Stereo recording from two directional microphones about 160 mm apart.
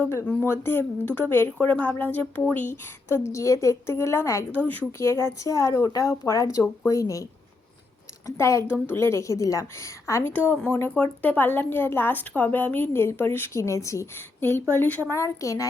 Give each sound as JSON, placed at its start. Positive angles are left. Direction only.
{"t": 0.0, "sound": "a woman's voice", "side_deg": 10}
{"t": 8.4, "sound": "a woman's voice", "side_deg": 20}